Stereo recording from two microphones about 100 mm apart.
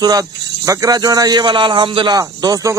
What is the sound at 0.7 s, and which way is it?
A man's voice, 40° right (ahead or behind).